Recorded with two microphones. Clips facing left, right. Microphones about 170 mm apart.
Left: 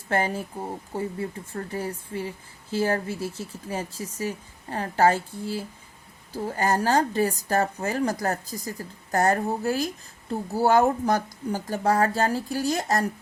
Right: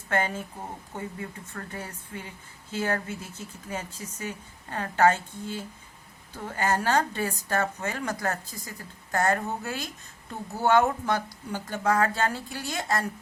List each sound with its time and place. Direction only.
0.1 s a woman's voice: 35° left (ahead or behind)